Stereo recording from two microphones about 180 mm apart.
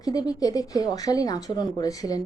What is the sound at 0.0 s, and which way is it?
A woman's voice, 20° left (ahead or behind).